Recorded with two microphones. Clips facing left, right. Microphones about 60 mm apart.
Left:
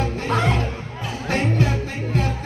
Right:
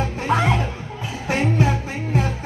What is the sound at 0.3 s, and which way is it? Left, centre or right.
Music, centre.